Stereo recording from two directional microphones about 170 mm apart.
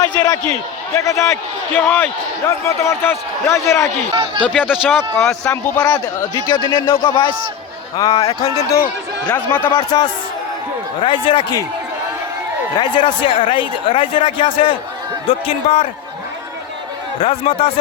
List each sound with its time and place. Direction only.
0.0 s a man's voice: 20° left (ahead or behind)
4.1 s speech: 30° right (ahead or behind)
4.4 s a man's voice: 5° left (ahead or behind)
4.9 s a man's voice: 15° left (ahead or behind); by 7.3 s 30° left (ahead or behind)
8.3 s a man's voice: 20° left (ahead or behind)
9.7 s a man's voice: 25° left (ahead or behind)
12.7 s a man's voice: 25° left (ahead or behind)
17.2 s speech: 35° left (ahead or behind)